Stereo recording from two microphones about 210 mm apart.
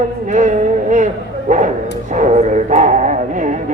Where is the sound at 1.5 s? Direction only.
35° right (ahead or behind).